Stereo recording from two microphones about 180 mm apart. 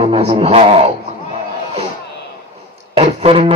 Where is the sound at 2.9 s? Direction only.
30° right (ahead or behind).